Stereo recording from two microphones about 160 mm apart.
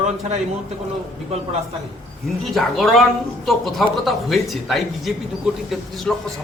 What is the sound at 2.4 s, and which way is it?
A man's voice, centre (ahead or behind).